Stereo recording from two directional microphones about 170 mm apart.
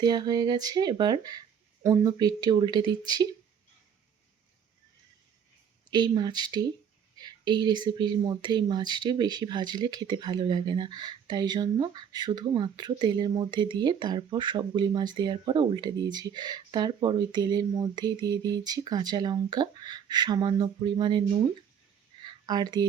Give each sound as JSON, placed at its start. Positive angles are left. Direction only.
{"t": 0.0, "sound": "speech", "side_deg": -25}
{"t": 5.9, "sound": "speech", "side_deg": -25}
{"t": 22.2, "sound": "a sound", "side_deg": -25}